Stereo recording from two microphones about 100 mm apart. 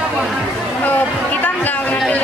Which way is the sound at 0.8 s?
15° left (ahead or behind).